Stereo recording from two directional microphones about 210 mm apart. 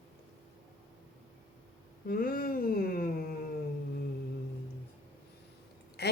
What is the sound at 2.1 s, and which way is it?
Humming, 45° left (ahead or behind).